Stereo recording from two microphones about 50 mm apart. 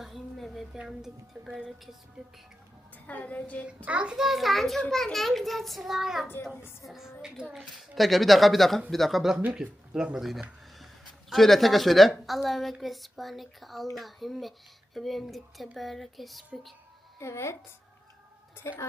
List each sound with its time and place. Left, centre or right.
0.0 s a sound: centre
0.9 s speech: centre
3.1 s a woman's voice: left
3.8 s a child's voice: right
4.2 s speech: centre
9.9 s speech: centre
11.3 s speech: centre
17.2 s speech: left
18.6 s speech: left